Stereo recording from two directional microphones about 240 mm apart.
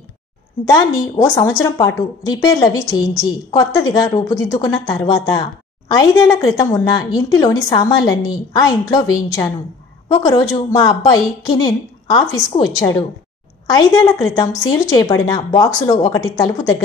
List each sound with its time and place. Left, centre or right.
0.7 s a woman's voice: centre